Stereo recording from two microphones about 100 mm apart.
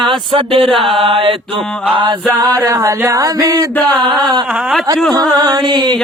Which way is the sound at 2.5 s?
30° right (ahead or behind).